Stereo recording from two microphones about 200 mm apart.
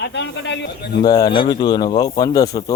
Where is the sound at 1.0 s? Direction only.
20° left (ahead or behind).